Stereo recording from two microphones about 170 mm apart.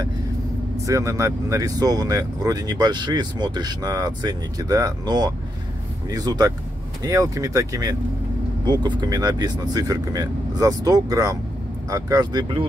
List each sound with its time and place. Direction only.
0.8 s speech: 15° right (ahead or behind)